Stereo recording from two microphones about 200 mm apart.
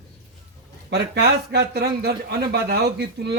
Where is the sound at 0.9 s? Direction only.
55° right (ahead or behind).